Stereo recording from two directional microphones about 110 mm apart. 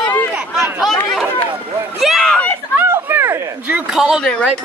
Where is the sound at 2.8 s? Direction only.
20° right (ahead or behind).